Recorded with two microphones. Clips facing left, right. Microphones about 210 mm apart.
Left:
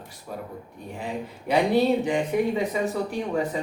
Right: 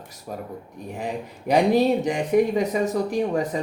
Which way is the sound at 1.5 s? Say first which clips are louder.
Right 2 dB; 40° right (ahead or behind).